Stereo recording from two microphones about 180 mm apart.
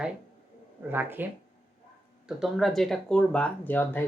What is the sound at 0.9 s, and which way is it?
Speech, 10° right (ahead or behind).